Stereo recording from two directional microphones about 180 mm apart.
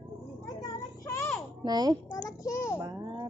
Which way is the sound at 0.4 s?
20° left (ahead or behind).